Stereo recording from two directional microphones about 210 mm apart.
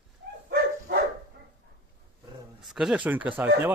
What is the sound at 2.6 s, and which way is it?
Speech, centre (ahead or behind).